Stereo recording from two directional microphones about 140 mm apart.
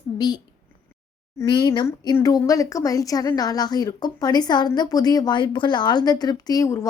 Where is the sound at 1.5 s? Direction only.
35° left (ahead or behind).